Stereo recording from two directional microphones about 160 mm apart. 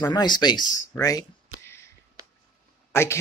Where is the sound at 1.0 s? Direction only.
20° left (ahead or behind).